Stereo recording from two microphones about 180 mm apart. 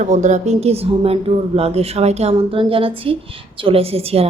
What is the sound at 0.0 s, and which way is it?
A woman's voice, 40° right (ahead or behind).